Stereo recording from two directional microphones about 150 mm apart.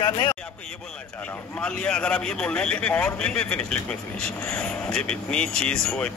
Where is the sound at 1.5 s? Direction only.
5° left (ahead or behind).